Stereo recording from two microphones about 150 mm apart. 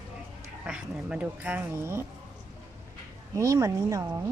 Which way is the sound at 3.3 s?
20° right (ahead or behind).